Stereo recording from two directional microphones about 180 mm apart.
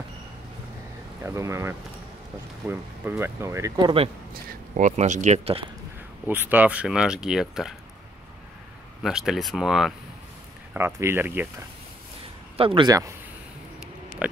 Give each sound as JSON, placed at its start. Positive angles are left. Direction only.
{"t": 1.2, "sound": "speech", "side_deg": -15}
{"t": 4.3, "sound": "speech", "side_deg": -45}
{"t": 6.2, "sound": "speech", "side_deg": -10}
{"t": 9.0, "sound": "speech", "side_deg": 0}
{"t": 11.0, "sound": "speech", "side_deg": -10}
{"t": 12.5, "sound": "speech", "side_deg": -30}
{"t": 14.2, "sound": "pig", "side_deg": -5}